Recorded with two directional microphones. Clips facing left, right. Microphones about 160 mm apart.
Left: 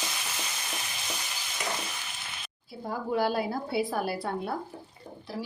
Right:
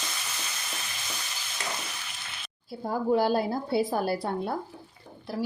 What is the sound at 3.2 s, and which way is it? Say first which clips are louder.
A woman's voice: right 3 dB; 30° right (ahead or behind).